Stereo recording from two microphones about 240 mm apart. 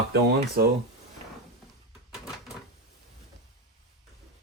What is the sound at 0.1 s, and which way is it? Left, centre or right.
Speech, right.